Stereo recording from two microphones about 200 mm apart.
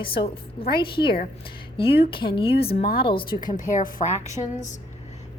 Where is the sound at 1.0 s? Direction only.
50° left (ahead or behind).